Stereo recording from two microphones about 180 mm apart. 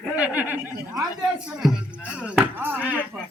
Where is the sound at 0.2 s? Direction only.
10° right (ahead or behind).